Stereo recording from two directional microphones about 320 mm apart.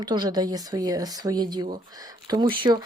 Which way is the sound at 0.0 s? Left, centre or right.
Centre.